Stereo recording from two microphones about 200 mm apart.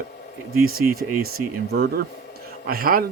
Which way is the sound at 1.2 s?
50° right (ahead or behind).